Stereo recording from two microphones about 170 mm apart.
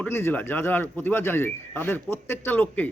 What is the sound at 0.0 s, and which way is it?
A man's voice, 15° left (ahead or behind).